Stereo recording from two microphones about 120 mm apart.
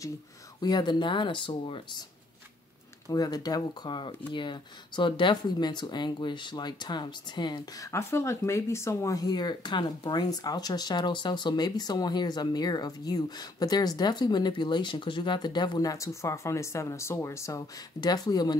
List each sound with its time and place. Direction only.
0.6 s speech: 35° left (ahead or behind)
3.1 s speech: 30° left (ahead or behind)